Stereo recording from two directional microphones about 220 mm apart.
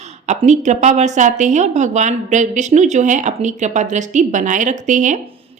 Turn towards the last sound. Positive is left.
turn(degrees=-35)  # may be behind; listen again after turning